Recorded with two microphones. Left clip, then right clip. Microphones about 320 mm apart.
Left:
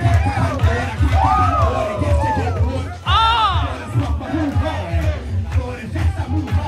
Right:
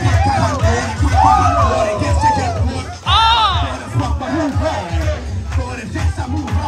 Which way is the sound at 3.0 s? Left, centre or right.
Centre.